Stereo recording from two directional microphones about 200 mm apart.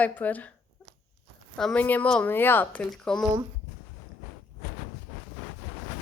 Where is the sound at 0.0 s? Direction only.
10° left (ahead or behind).